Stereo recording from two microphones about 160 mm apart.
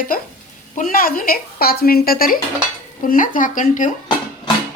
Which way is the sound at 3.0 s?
55° left (ahead or behind).